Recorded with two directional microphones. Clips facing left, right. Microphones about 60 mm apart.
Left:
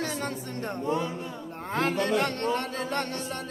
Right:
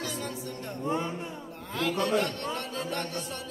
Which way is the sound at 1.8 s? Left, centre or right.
Left.